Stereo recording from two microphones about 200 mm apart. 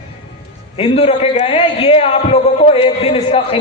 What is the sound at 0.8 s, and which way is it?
A man's voice, 30° left (ahead or behind).